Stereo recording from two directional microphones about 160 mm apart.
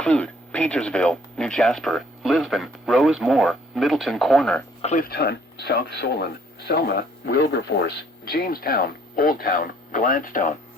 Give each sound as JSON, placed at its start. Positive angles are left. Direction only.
{"t": 0.0, "sound": "speech", "side_deg": 5}
{"t": 4.8, "sound": "speech", "side_deg": 45}
{"t": 5.0, "sound": "speech", "side_deg": 75}